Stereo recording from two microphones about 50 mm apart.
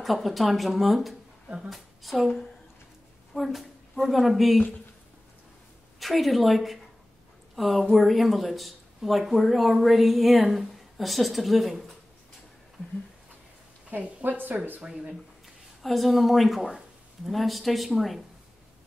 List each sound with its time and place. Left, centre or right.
0.0 s a woman's voice: centre
5.9 s speech: centre
13.8 s a woman's voice: right
14.8 s speech: right
15.8 s speech: centre